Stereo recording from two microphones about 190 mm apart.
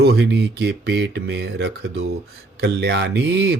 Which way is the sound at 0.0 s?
60° right (ahead or behind).